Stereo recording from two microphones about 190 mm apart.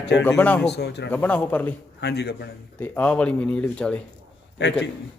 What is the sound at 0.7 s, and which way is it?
Speech, 60° left (ahead or behind).